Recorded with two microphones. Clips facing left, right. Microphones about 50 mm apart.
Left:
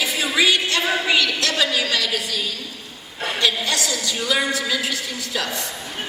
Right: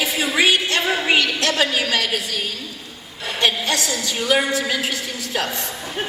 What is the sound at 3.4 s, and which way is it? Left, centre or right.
A woman's voice, right.